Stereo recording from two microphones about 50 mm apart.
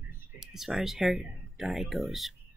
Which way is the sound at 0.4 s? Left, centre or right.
Centre.